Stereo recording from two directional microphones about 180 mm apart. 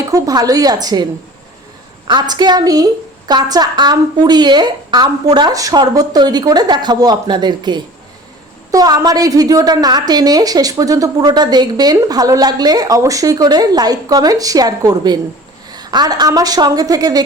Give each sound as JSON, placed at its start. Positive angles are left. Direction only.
{"t": 0.1, "sound": "a woman's voice", "side_deg": -20}
{"t": 2.0, "sound": "a woman's voice", "side_deg": -25}